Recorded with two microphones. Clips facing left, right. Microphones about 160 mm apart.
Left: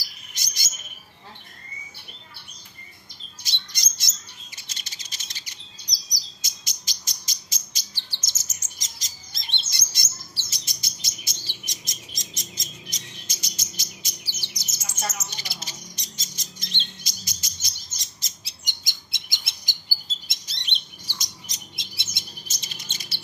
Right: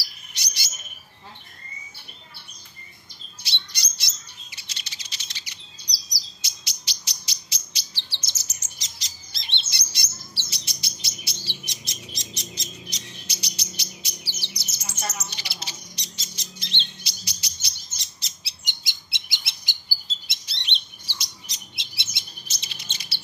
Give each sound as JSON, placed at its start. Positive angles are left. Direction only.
{"t": 0.3, "sound": "chirp", "side_deg": 45}
{"t": 3.4, "sound": "bird", "side_deg": 45}
{"t": 4.6, "sound": "chirp", "side_deg": 45}
{"t": 14.9, "sound": "squawk", "side_deg": 45}